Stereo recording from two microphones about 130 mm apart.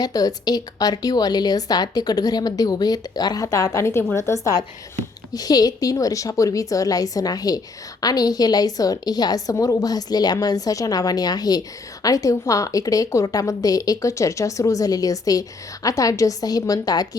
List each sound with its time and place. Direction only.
0.0 s a woman's voice: 30° left (ahead or behind)